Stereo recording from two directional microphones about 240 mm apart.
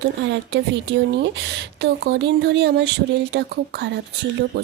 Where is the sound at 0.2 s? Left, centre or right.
Right.